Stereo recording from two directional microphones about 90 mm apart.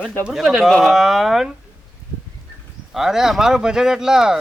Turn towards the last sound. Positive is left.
turn(degrees=-5)  # may be behind; listen again after turning